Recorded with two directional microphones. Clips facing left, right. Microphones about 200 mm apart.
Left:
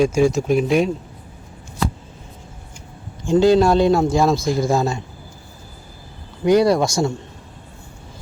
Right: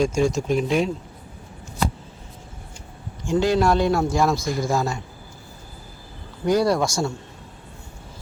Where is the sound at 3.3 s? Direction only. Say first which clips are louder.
Left 6 dB; 25° left (ahead or behind).